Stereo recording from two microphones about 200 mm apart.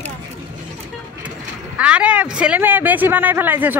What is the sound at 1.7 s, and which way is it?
Speech, 5° right (ahead or behind).